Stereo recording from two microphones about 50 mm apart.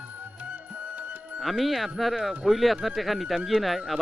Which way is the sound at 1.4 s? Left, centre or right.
Centre.